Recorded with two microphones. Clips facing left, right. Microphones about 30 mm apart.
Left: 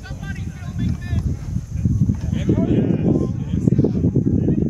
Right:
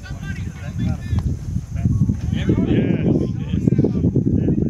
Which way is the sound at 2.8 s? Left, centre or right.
Right.